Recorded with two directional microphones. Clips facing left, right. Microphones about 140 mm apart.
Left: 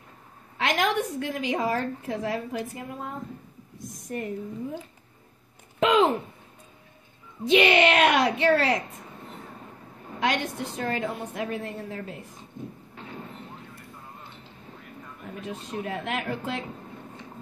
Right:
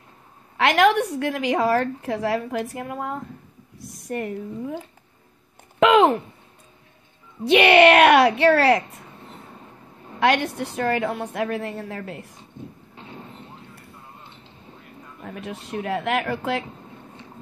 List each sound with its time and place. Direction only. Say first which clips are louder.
0.6 s a woman's voice: right 7 dB; 70° right (ahead or behind)
3.7 s a sound: right 4 dB; 75° right (ahead or behind)
5.8 s speech: right 5 dB; 65° right (ahead or behind)
7.4 s a woman's voice: right 6 dB; 65° right (ahead or behind)
10.2 s a woman's voice: right 6 dB; 65° right (ahead or behind)
12.9 s clip-clop: even; 30° right (ahead or behind)
15.4 s a woman's voice: right 4 dB; 70° right (ahead or behind)